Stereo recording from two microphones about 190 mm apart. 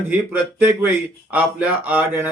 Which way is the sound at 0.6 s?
10° right (ahead or behind).